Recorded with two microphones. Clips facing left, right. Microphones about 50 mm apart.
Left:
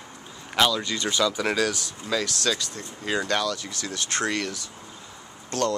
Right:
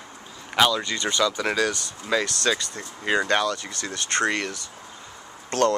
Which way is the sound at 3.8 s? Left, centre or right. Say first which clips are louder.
Right 4 dB; centre.